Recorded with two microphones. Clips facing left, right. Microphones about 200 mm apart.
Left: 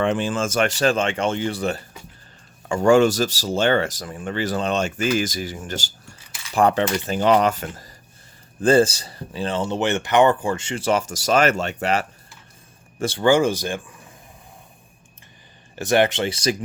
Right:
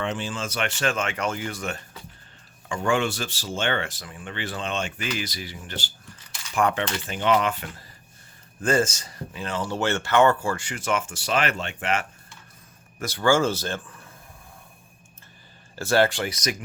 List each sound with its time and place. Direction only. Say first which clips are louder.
0.0 s speech: left 8 dB; 55° left (ahead or behind); by 12.0 s 40° left (ahead or behind)
13.0 s speech: left 4 dB; 25° left (ahead or behind)
15.7 s speech: left 2 dB; 20° left (ahead or behind)